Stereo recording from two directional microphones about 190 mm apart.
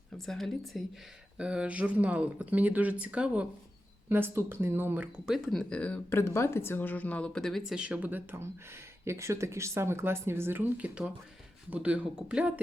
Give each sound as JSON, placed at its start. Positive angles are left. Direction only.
{"t": 0.3, "sound": "speech", "side_deg": 0}